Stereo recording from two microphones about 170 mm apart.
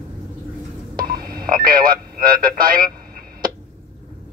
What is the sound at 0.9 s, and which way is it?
Telephone dialing, 55° right (ahead or behind).